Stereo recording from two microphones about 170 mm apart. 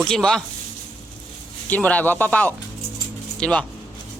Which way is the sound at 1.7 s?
10° left (ahead or behind).